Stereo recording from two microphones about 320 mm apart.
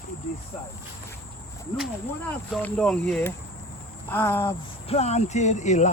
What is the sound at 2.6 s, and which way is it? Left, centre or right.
Speech, centre.